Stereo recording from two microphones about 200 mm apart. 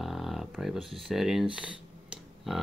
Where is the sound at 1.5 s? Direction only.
5° right (ahead or behind).